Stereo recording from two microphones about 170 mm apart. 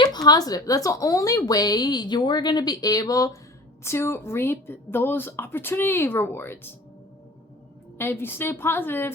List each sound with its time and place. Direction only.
0.0 s a woman's voice: 25° left (ahead or behind)
7.9 s a woman's voice: 15° left (ahead or behind)